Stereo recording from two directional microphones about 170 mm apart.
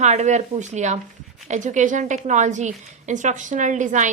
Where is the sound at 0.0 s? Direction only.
40° right (ahead or behind).